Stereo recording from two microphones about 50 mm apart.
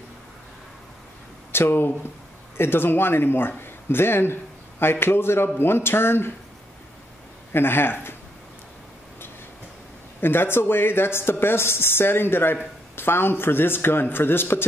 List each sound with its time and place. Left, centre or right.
1.5 s speech: left
7.5 s speech: left
10.2 s speech: left